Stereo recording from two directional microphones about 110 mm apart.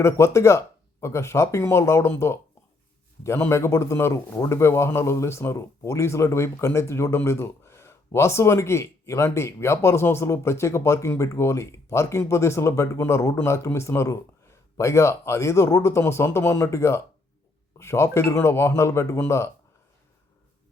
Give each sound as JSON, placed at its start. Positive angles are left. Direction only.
{"t": 0.0, "sound": "a man's voice", "side_deg": 25}